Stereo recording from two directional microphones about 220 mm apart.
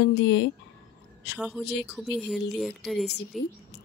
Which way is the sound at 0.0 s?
50° left (ahead or behind).